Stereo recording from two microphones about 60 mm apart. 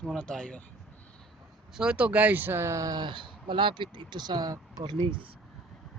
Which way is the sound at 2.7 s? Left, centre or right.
Right.